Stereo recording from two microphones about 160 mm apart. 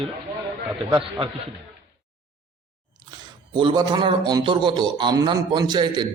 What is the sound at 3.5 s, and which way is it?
A man's voice, 30° right (ahead or behind).